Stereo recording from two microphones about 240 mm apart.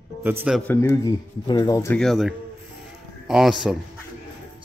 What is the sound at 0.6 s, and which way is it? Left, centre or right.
A man's voice, centre.